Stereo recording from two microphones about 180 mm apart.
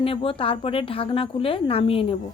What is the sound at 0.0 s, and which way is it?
A woman's voice, 30° left (ahead or behind).